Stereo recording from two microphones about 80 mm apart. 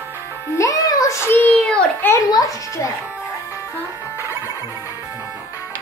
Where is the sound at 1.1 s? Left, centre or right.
Left.